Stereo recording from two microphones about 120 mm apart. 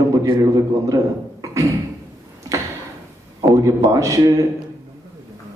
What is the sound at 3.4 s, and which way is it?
Speech, 25° right (ahead or behind).